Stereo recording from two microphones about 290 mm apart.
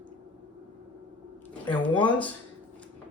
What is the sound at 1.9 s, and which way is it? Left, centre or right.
Speech, centre.